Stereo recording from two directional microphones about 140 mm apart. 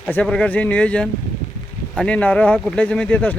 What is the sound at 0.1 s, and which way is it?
Speech, 10° left (ahead or behind).